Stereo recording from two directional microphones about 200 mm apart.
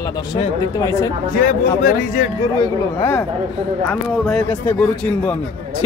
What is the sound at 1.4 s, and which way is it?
Speech, 40° left (ahead or behind).